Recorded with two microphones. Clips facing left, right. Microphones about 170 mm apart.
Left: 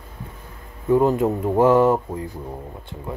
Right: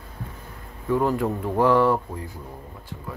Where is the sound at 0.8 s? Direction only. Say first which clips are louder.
Left 5 dB; 20° left (ahead or behind).